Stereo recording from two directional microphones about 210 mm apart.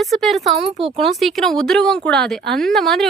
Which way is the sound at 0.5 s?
30° right (ahead or behind).